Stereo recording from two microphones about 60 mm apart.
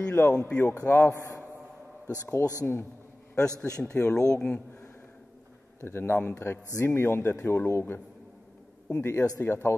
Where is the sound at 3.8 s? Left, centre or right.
Centre.